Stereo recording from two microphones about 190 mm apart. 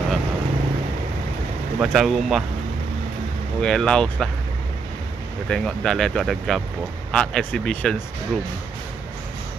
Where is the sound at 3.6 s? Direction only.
5° left (ahead or behind).